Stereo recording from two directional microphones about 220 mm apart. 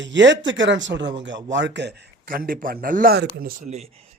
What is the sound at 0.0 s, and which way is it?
A man's voice, 55° right (ahead or behind).